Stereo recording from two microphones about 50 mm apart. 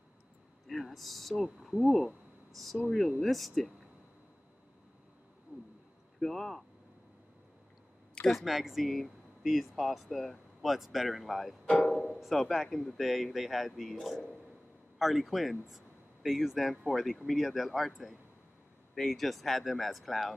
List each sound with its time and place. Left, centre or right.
0.7 s speech: centre
6.1 s speech: centre
8.3 s speech: centre
11.6 s music: left
12.0 s speech: centre
15.0 s a man's voice: centre